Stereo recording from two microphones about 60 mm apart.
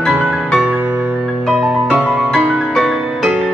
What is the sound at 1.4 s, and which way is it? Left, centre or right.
Music, centre.